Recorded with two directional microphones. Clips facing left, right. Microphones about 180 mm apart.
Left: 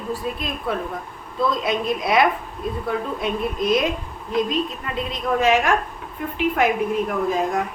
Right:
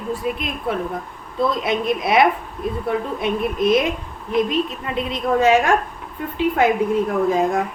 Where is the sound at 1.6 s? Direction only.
25° right (ahead or behind).